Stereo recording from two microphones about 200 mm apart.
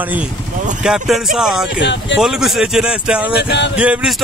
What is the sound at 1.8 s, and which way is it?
Speech, 60° left (ahead or behind).